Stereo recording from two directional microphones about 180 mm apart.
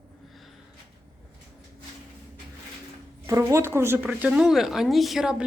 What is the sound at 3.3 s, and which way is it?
A woman's voice, 15° right (ahead or behind).